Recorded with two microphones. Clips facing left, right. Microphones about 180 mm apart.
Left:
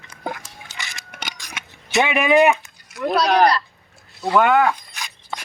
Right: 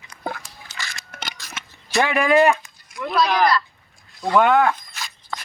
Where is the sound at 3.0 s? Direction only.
40° left (ahead or behind).